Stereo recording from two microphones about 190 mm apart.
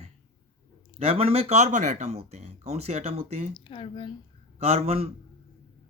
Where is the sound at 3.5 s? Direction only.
25° left (ahead or behind).